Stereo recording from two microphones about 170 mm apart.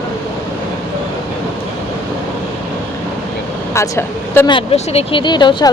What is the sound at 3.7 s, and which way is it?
Speech, 15° left (ahead or behind).